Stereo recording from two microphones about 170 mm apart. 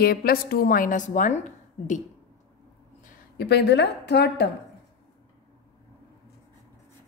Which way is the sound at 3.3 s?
75° left (ahead or behind).